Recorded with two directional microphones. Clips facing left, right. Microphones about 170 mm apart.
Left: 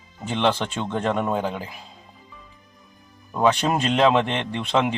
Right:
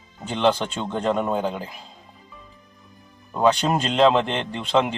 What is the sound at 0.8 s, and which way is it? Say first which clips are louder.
Speech: left 1 dB; 10° right (ahead or behind).